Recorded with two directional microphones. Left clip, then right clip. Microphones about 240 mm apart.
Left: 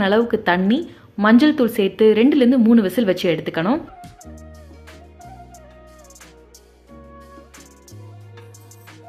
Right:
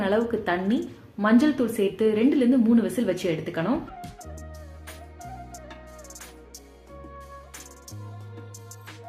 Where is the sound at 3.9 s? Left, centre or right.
Centre.